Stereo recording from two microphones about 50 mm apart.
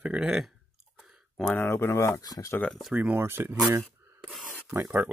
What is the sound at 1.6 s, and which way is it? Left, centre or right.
Speech, left.